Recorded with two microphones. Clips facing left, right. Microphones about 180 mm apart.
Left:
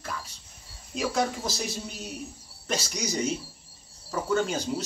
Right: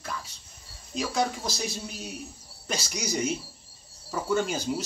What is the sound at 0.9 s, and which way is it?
Speech, 5° left (ahead or behind).